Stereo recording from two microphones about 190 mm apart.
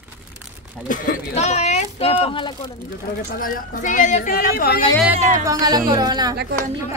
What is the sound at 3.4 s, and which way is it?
Speech, 45° left (ahead or behind).